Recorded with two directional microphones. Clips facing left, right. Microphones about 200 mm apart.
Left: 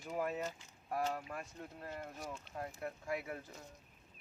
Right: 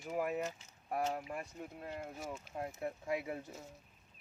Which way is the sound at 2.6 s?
20° right (ahead or behind).